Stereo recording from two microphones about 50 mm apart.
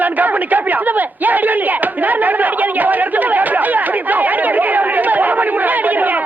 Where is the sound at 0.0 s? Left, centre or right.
Right.